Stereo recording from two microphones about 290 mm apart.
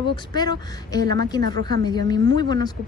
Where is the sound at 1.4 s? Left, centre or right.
Right.